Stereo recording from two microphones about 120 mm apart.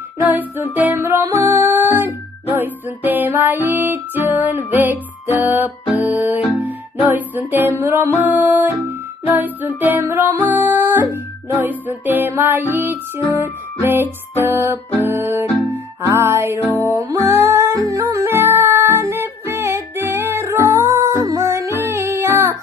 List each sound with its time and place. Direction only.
0.2 s music: 15° right (ahead or behind)